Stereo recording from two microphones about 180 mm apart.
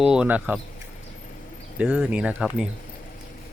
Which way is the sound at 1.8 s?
5° right (ahead or behind).